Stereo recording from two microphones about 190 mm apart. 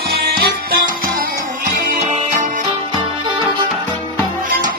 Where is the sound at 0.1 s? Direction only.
55° right (ahead or behind).